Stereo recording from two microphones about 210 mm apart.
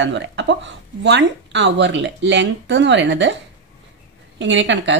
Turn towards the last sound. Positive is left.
turn(degrees=-60)  # may be behind; listen again after turning